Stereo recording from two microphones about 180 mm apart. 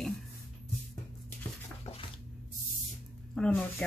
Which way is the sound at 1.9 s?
35° left (ahead or behind).